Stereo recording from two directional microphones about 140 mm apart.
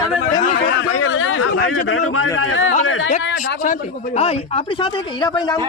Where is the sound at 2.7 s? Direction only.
60° left (ahead or behind).